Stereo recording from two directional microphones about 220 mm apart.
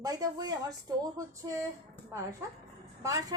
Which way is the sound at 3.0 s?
15° right (ahead or behind).